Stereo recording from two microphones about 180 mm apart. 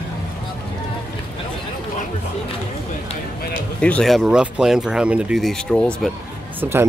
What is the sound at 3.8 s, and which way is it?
Speech, 5° left (ahead or behind).